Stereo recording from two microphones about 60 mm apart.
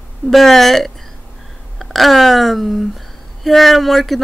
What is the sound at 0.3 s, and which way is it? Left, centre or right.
Speech, centre.